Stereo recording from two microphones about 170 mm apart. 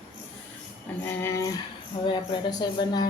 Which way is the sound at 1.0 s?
15° left (ahead or behind).